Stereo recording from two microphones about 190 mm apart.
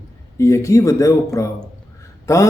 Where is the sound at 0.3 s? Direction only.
15° left (ahead or behind).